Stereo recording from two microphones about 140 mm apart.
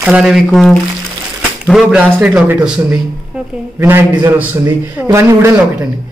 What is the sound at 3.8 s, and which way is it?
Speech, 15° right (ahead or behind).